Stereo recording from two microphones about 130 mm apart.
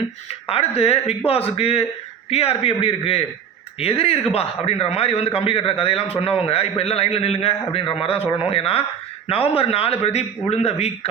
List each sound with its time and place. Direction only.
0.4 s a man's voice: 50° left (ahead or behind)